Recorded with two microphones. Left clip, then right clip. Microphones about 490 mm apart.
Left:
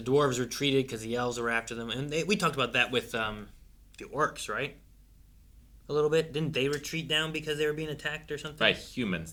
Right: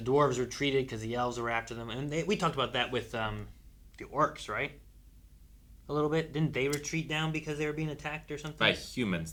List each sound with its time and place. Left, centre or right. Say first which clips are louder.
0.0 s speech: left 1 dB; right
5.9 s speech: left 4 dB; right
8.9 s speech: even; right